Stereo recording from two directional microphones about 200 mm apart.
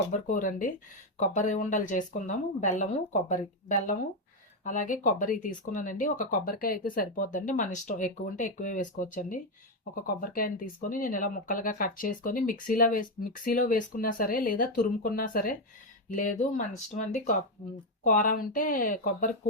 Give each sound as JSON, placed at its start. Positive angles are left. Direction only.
{"t": 0.1, "sound": "speech", "side_deg": 40}